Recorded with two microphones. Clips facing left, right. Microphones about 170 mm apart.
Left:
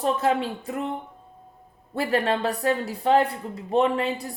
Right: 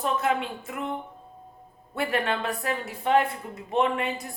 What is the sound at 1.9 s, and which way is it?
A woman's voice, 35° left (ahead or behind).